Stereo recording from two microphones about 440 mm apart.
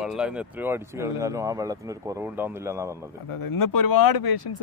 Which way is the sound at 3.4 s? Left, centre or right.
Left.